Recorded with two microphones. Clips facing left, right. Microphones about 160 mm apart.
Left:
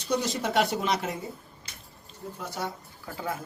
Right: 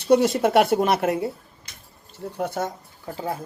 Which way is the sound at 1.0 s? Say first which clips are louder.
Right 11 dB; 65° right (ahead or behind).